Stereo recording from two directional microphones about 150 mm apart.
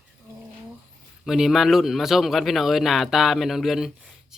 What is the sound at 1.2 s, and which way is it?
A man's voice, centre (ahead or behind).